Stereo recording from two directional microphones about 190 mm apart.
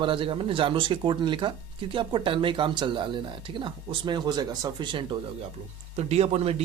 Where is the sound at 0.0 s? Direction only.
25° right (ahead or behind).